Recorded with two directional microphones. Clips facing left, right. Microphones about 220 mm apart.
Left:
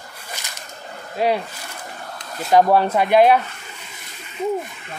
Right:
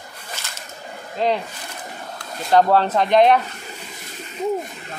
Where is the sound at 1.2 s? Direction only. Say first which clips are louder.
Left 1 dB; 10° left (ahead or behind).